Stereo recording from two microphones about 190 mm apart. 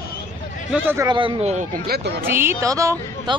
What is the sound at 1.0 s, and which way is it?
Speech, 25° right (ahead or behind).